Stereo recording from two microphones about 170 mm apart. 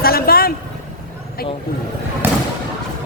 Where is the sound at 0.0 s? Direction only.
60° left (ahead or behind).